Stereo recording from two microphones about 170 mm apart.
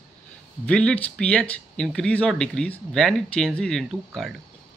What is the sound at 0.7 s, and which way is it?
Speech, 5° left (ahead or behind).